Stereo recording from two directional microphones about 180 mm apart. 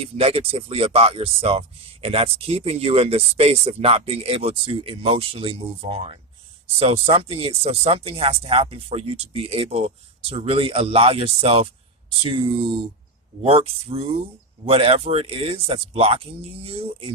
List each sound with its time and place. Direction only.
0.0 s speech: 35° right (ahead or behind)